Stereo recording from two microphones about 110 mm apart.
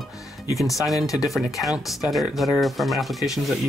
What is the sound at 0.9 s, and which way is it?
Speech, 30° left (ahead or behind).